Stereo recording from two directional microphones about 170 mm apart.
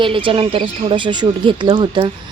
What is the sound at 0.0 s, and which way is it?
Speech, 30° right (ahead or behind).